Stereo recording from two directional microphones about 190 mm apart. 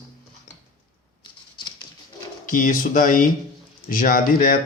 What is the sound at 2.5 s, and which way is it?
Speech, 45° left (ahead or behind).